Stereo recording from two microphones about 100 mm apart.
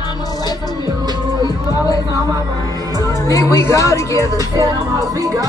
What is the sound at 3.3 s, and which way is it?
Music, 35° left (ahead or behind).